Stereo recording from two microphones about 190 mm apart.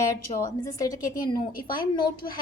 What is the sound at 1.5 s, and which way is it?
Speech, 50° left (ahead or behind).